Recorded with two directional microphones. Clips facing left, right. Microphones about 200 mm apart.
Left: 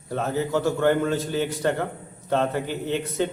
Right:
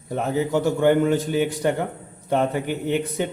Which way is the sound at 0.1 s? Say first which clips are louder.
Right 2 dB; 15° right (ahead or behind).